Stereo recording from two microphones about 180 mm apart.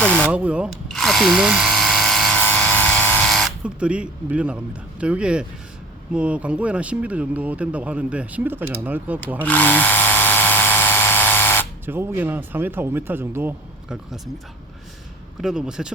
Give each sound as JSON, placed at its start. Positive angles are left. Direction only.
{"t": 0.0, "sound": "a sound", "side_deg": 5}
{"t": 0.3, "sound": "electric toothbrush", "side_deg": -5}
{"t": 6.1, "sound": "speech", "side_deg": -5}
{"t": 9.4, "sound": "drill", "side_deg": 10}
{"t": 11.9, "sound": "speech", "side_deg": -10}
{"t": 15.4, "sound": "a man's voice", "side_deg": -5}